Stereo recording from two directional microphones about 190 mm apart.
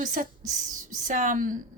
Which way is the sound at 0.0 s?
40° right (ahead or behind).